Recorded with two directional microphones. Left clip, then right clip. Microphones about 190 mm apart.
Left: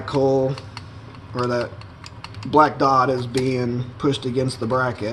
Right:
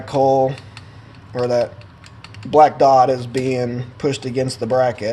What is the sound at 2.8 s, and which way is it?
Speech, 55° right (ahead or behind).